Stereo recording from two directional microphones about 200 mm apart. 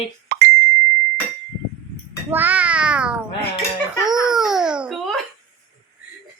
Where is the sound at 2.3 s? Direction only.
10° right (ahead or behind).